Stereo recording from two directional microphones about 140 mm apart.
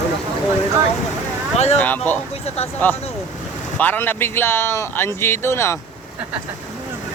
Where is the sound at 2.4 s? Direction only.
50° left (ahead or behind).